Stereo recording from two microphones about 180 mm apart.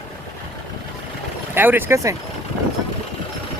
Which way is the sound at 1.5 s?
10° right (ahead or behind).